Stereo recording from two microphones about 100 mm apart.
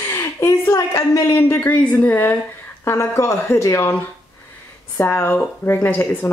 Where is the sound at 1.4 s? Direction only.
20° left (ahead or behind).